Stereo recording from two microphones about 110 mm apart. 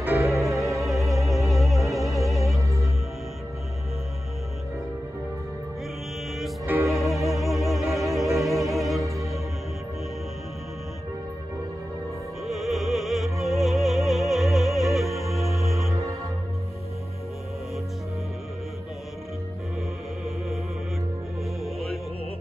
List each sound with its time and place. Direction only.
0.1 s music: 25° right (ahead or behind)
0.8 s music: centre (ahead or behind)
6.6 s music: 25° right (ahead or behind)
7.3 s music: centre (ahead or behind)
9.0 s music: 30° right (ahead or behind)
12.4 s music: centre (ahead or behind)
15.9 s music: 30° right (ahead or behind)
21.6 s music: centre (ahead or behind)